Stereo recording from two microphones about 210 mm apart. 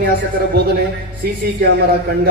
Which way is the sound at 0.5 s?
50° right (ahead or behind).